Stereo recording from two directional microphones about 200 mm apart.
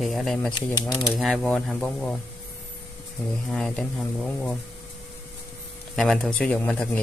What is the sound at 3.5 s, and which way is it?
Speech, 5° left (ahead or behind).